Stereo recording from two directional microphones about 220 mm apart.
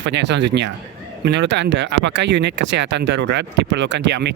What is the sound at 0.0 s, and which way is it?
Speech, 55° right (ahead or behind).